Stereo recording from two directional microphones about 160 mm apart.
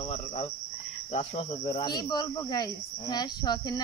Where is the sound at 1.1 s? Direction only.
35° left (ahead or behind).